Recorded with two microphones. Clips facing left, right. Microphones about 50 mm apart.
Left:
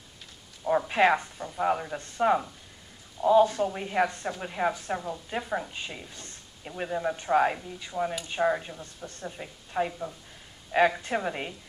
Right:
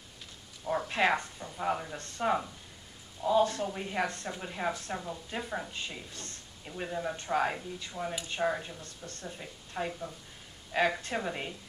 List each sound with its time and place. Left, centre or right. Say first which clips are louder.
0.7 s a woman's voice: left 6 dB; centre